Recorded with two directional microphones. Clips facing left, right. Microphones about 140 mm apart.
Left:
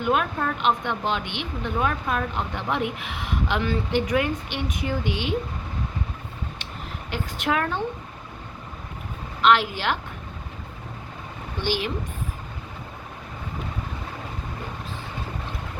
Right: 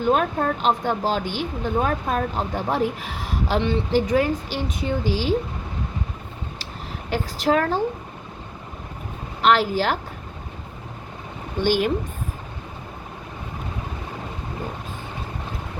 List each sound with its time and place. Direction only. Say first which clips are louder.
0.0 s speech: right 3 dB; 35° right (ahead or behind)
3.6 s speech: right 5 dB; 25° right (ahead or behind)
7.1 s speech: right 5 dB; 35° right (ahead or behind)
9.4 s speech: right 2 dB; 40° right (ahead or behind)
11.6 s speech: right 6 dB; 45° right (ahead or behind)